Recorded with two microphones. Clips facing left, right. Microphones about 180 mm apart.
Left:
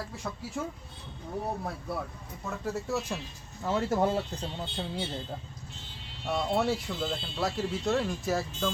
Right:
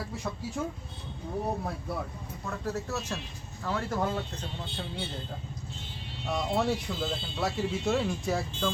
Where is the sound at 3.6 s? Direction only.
25° left (ahead or behind).